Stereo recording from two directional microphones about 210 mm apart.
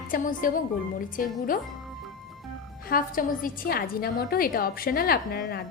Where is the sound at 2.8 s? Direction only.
45° left (ahead or behind).